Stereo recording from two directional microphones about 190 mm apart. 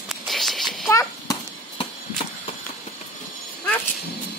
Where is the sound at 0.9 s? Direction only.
15° left (ahead or behind).